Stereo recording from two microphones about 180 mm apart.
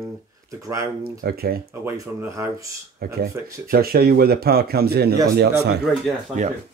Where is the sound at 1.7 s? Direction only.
15° right (ahead or behind).